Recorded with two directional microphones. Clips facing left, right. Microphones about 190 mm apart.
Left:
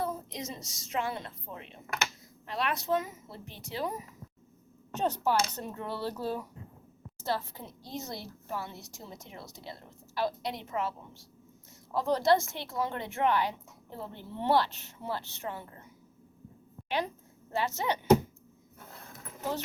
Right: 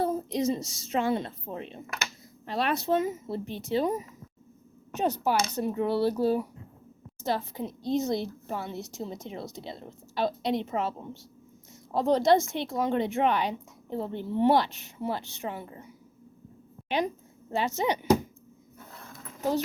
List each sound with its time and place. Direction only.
0.0 s a woman's voice: 30° right (ahead or behind)
4.9 s a woman's voice: 10° right (ahead or behind)
17.5 s speech: 20° right (ahead or behind)